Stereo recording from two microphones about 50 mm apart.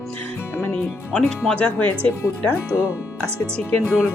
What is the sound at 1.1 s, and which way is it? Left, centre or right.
Speech, centre.